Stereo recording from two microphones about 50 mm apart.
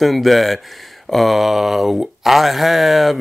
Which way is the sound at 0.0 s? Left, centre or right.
Centre.